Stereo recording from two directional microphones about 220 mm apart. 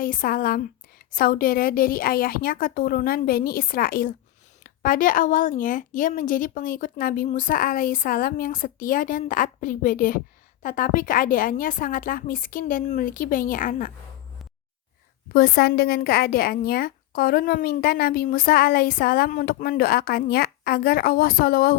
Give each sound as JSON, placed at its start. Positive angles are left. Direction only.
{"t": 0.0, "sound": "speech", "side_deg": 40}
{"t": 15.3, "sound": "speech", "side_deg": 45}